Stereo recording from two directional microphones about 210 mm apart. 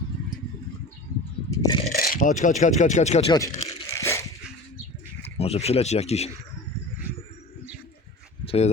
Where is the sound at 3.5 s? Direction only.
30° left (ahead or behind).